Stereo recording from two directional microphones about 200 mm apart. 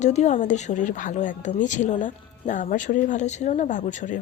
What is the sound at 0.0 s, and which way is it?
A woman's voice, 35° left (ahead or behind).